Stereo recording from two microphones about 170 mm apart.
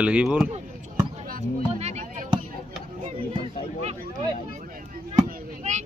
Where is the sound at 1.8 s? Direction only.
40° right (ahead or behind).